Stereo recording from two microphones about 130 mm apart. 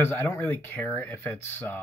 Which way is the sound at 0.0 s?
15° left (ahead or behind).